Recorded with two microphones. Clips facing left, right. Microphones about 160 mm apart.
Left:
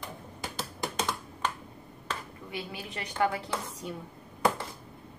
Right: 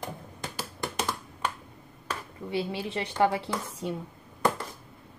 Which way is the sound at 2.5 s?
30° right (ahead or behind).